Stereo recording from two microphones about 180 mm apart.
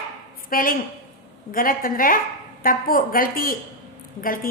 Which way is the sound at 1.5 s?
50° left (ahead or behind).